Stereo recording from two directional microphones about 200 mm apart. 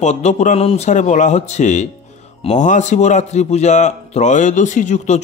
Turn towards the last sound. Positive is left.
turn(degrees=40)  # may be behind; listen again after turning